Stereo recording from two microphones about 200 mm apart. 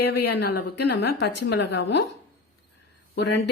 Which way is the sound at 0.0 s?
55° left (ahead or behind).